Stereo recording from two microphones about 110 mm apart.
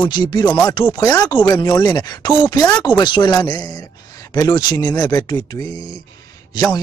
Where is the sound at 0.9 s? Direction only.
30° left (ahead or behind).